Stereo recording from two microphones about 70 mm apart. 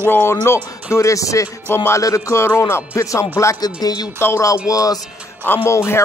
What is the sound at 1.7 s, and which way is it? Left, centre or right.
Speech, left.